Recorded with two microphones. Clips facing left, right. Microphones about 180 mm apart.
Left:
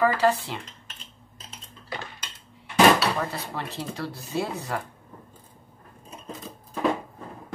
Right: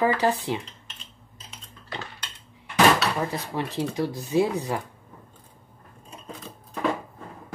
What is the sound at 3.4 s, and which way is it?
Speech, 15° right (ahead or behind).